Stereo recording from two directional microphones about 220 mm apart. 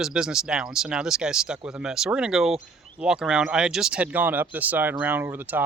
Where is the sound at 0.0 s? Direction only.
5° right (ahead or behind).